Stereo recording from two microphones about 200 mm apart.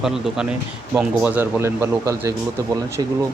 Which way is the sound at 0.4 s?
5° right (ahead or behind).